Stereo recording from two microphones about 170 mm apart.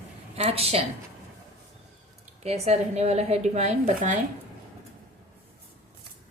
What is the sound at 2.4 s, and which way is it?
Speech, 40° right (ahead or behind).